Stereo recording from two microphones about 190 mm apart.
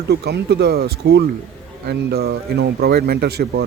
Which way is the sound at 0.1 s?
55° right (ahead or behind).